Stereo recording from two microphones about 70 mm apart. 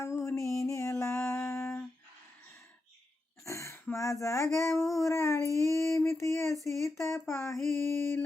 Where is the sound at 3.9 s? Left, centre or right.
Left.